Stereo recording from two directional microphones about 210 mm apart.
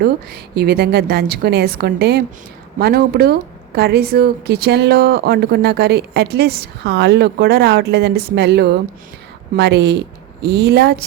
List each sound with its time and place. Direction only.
0.0 s a woman's voice: 50° right (ahead or behind)